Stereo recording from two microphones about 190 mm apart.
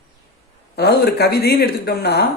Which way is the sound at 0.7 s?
60° left (ahead or behind).